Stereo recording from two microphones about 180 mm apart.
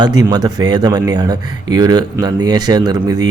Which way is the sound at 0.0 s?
20° right (ahead or behind).